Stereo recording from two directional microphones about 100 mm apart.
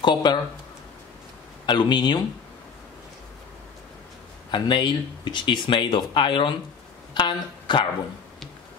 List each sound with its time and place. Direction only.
0.0 s speech: 50° left (ahead or behind)
1.7 s speech: 50° left (ahead or behind)
4.5 s speech: 55° left (ahead or behind)
7.2 s a sound: 50° left (ahead or behind)